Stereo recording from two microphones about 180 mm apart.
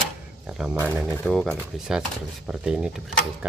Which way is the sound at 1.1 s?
10° left (ahead or behind).